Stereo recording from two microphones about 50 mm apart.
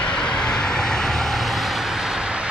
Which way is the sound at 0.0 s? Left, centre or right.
Centre.